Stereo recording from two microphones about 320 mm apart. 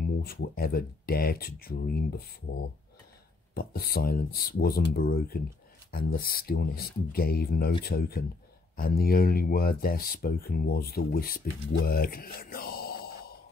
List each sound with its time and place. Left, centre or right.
0.0 s speech: left
3.5 s speech: left